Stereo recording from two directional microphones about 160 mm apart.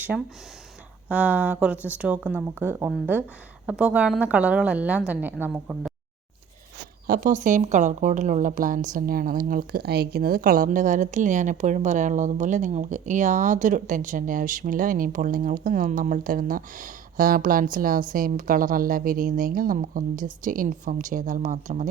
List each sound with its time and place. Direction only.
0.1 s a woman's voice: centre (ahead or behind)
7.1 s a woman's voice: 60° right (ahead or behind)